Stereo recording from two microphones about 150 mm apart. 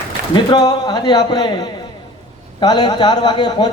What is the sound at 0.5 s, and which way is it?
A man's voice, 25° left (ahead or behind).